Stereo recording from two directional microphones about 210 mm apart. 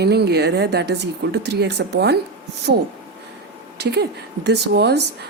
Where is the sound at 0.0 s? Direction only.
50° right (ahead or behind).